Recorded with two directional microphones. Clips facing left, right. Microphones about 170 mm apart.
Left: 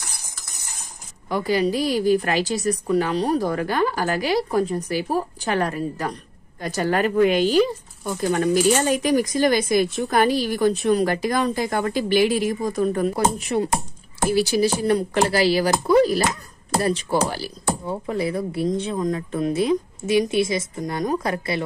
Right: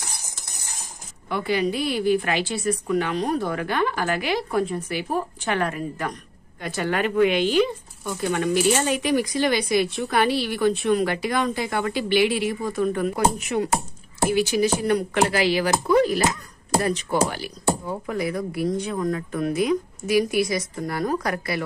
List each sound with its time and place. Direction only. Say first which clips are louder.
1.3 s speech: left 3 dB; 40° left (ahead or behind)